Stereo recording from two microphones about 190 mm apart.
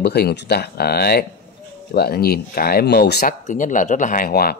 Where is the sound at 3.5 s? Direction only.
40° left (ahead or behind).